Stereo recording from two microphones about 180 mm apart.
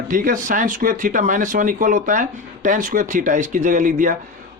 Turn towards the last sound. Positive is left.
turn(degrees=-50)  # may be behind; listen again after turning